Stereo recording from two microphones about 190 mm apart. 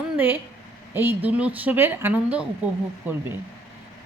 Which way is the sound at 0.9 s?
10° right (ahead or behind).